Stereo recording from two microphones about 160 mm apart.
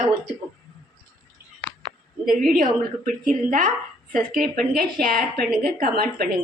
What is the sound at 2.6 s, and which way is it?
A woman's voice, 60° right (ahead or behind).